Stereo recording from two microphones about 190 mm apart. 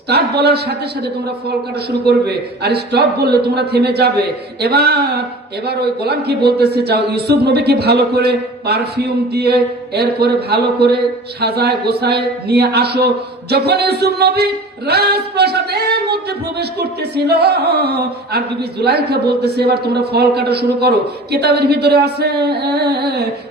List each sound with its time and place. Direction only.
0.1 s speech: 60° right (ahead or behind)